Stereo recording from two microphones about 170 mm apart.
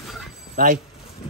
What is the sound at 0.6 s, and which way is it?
Speech, 55° right (ahead or behind).